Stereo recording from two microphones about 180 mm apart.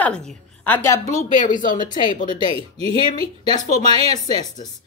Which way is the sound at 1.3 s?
45° left (ahead or behind).